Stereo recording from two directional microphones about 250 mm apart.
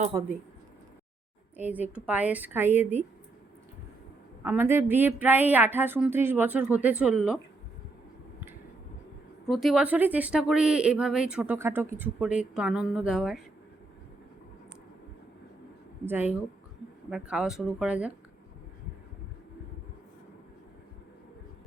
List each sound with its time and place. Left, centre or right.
0.1 s a woman's voice: centre
1.5 s a woman's voice: centre
4.4 s a woman's voice: centre
9.5 s speech: centre
16.0 s a woman's voice: centre